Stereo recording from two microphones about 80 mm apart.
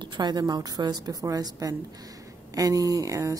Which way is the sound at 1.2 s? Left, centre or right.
Right.